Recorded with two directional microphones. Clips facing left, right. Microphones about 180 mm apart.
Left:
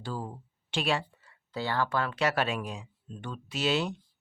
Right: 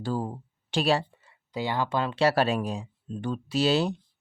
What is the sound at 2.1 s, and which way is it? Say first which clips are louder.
Speech: right 8 dB; 35° right (ahead or behind).